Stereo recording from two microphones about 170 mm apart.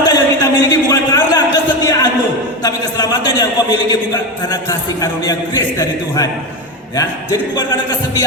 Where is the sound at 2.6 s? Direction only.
20° left (ahead or behind).